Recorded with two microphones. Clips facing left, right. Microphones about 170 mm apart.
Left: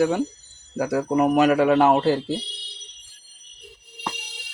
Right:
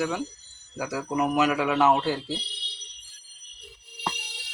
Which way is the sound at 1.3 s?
55° left (ahead or behind).